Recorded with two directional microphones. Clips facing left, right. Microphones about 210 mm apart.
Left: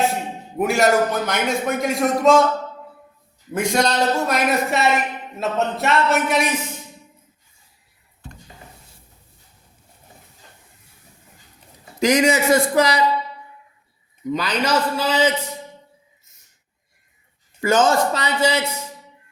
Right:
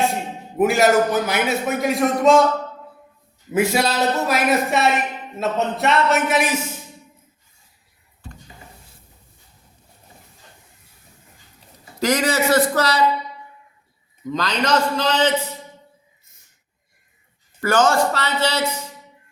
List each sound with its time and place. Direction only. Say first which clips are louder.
0.6 s speech: right 2 dB; centre (ahead or behind)
3.5 s speech: right 1 dB; 5° right (ahead or behind)
11.9 s speech: left 3 dB; 15° left (ahead or behind)
14.3 s speech: even; 10° left (ahead or behind)
17.6 s speech: even; 20° left (ahead or behind)